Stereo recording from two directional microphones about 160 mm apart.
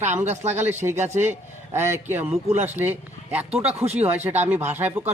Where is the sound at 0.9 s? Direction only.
45° right (ahead or behind).